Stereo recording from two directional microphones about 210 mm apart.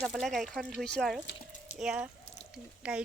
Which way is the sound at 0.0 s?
Centre (ahead or behind).